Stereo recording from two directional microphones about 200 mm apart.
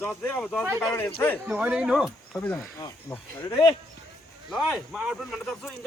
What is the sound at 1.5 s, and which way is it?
Speech, 5° right (ahead or behind).